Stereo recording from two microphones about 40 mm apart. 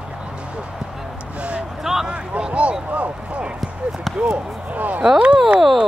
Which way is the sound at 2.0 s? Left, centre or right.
Right.